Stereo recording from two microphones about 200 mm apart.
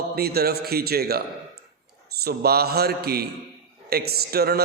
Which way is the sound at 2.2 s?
50° right (ahead or behind).